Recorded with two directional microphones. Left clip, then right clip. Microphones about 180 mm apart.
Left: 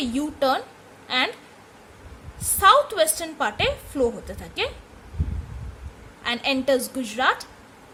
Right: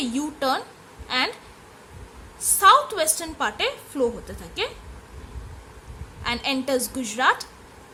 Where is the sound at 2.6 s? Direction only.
5° left (ahead or behind).